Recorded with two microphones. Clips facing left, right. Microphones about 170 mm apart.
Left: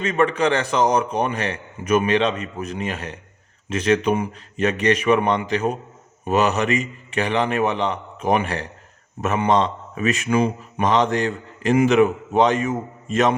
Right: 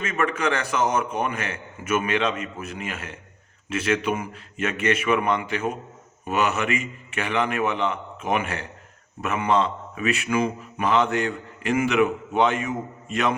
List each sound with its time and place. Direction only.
0.0 s a man's voice: 35° left (ahead or behind)